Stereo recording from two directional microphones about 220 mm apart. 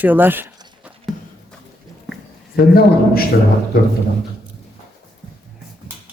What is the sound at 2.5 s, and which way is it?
Speech, 45° left (ahead or behind).